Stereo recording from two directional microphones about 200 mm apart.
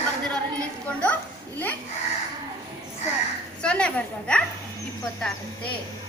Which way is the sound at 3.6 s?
5° left (ahead or behind).